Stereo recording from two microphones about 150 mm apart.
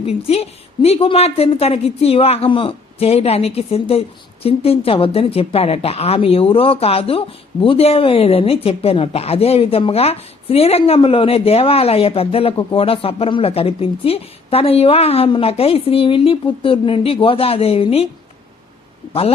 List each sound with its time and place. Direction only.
0.0 s a woman's voice: 40° left (ahead or behind)